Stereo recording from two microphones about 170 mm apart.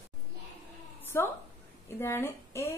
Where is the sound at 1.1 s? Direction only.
15° left (ahead or behind).